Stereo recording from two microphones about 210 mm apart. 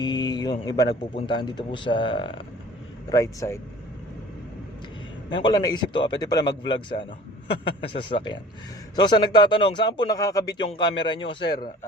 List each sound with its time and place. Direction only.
0.0 s a sound: 20° left (ahead or behind)
1.3 s a man's voice: 20° left (ahead or behind)
5.3 s a man's voice: 20° left (ahead or behind)
11.4 s speech: 50° left (ahead or behind)